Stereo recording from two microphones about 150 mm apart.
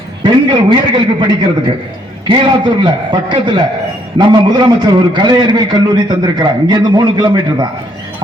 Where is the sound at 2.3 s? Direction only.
30° right (ahead or behind).